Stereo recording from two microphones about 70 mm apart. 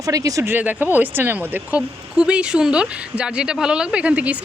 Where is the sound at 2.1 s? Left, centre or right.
Centre.